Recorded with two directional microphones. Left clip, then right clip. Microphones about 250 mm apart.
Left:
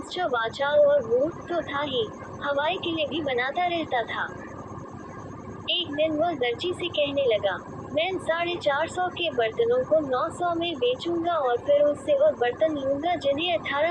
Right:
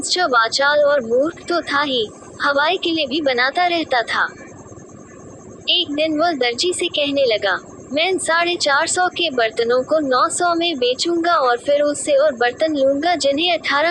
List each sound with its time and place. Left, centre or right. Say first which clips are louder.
0.1 s a woman's voice: right 11 dB; right
5.6 s a woman's voice: right 7 dB; right